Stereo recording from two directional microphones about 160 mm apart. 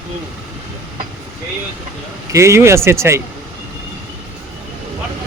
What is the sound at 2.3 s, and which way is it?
Speech, 15° right (ahead or behind).